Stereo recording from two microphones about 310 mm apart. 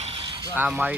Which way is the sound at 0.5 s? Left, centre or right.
Centre.